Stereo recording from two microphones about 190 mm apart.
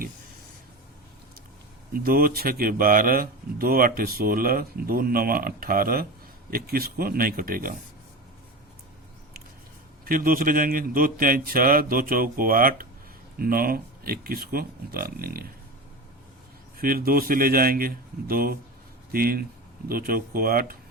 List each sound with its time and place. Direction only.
2.0 s speech: 50° right (ahead or behind)
10.0 s speech: 50° right (ahead or behind)
16.7 s speech: 50° right (ahead or behind)